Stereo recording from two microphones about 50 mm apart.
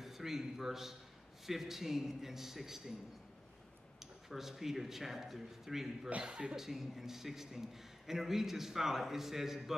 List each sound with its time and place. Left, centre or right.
0.0 s a man's voice: centre
4.0 s a man's voice: centre
6.0 s speech: right
6.5 s a man's voice: centre